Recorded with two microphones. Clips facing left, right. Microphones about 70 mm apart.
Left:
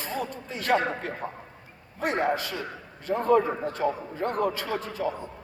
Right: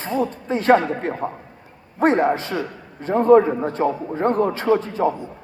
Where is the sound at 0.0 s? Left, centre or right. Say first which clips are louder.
Right 9 dB; right.